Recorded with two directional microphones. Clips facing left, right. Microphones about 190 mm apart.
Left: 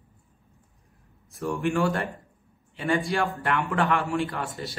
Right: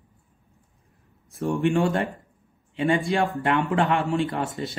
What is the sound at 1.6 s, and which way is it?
A man's voice, 20° right (ahead or behind).